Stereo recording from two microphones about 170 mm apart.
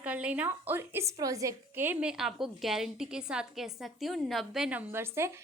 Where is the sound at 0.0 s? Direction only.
10° right (ahead or behind).